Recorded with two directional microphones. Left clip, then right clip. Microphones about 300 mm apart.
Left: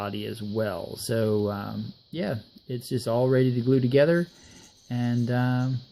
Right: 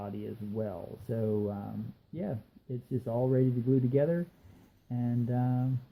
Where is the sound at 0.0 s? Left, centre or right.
Left.